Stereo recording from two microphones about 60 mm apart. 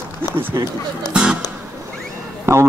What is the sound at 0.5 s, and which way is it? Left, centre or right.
Speech, right.